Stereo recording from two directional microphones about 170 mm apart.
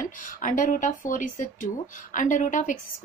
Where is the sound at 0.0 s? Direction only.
50° left (ahead or behind).